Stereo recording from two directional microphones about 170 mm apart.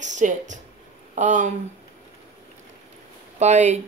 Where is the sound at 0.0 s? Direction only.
45° right (ahead or behind).